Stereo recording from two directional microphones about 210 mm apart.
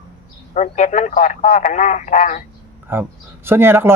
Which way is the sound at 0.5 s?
35° left (ahead or behind).